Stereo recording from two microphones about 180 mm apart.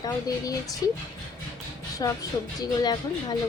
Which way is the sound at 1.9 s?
20° left (ahead or behind).